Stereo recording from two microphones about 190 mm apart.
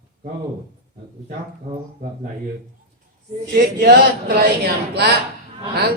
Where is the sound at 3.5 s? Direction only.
60° right (ahead or behind).